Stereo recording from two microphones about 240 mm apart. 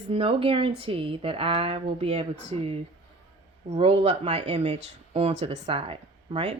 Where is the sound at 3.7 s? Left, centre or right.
Right.